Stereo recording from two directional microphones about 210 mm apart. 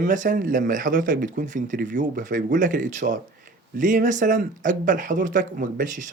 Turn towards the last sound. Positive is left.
turn(degrees=-40)  # may be behind; listen again after turning